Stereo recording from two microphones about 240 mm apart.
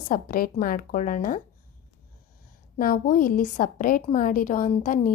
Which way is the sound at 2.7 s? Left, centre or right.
Left.